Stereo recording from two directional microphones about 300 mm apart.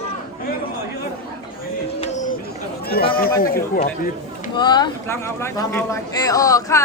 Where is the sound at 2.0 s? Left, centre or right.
Left.